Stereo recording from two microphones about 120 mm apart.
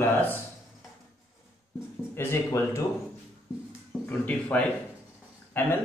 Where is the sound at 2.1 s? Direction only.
20° left (ahead or behind).